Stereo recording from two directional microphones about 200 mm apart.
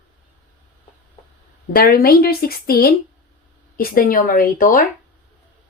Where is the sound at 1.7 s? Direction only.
50° left (ahead or behind).